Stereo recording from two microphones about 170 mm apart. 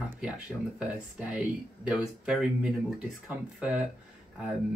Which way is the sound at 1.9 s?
5° right (ahead or behind).